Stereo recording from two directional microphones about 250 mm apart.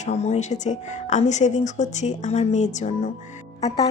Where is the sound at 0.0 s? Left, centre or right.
Left.